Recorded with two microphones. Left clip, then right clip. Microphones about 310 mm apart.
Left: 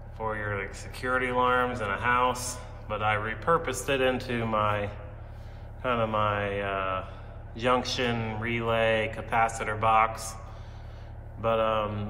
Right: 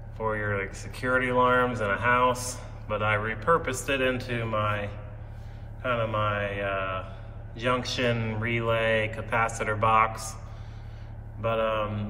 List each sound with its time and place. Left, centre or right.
0.2 s a man's voice: centre
11.4 s a man's voice: centre